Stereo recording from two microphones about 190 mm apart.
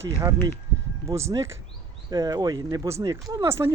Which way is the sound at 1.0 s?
15° right (ahead or behind).